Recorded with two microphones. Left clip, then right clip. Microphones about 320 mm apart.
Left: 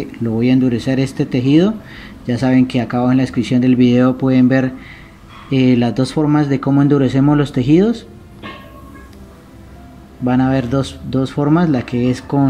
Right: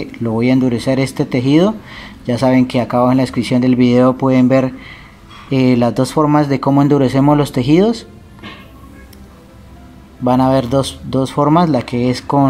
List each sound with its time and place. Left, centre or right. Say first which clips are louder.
0.7 s speech: right 2 dB; centre
10.2 s speech: right 4 dB; centre